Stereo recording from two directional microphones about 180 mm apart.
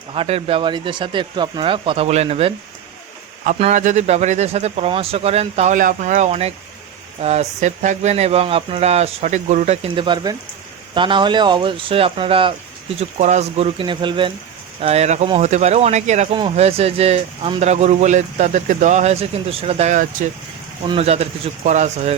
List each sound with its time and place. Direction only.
0.1 s speech: 30° right (ahead or behind)
3.6 s speech: 40° right (ahead or behind)
20.8 s speech: 35° right (ahead or behind)